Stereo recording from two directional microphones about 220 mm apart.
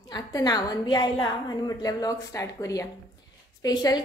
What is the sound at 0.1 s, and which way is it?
A woman's voice, 15° left (ahead or behind).